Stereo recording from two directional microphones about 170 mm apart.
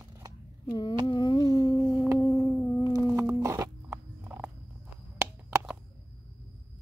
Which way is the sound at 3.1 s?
15° right (ahead or behind).